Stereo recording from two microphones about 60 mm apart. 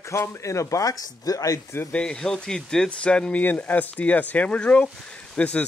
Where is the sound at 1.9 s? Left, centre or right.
Centre.